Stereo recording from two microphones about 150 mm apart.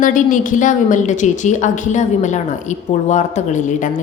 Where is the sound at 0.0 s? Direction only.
60° left (ahead or behind).